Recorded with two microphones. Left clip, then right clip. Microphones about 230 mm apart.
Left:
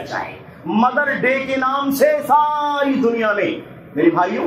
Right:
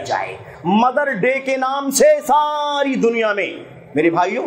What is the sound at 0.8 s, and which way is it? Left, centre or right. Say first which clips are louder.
A man's voice: left 1 dB; right.